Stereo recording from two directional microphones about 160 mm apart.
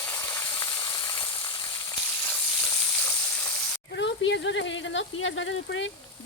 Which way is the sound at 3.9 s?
90° left.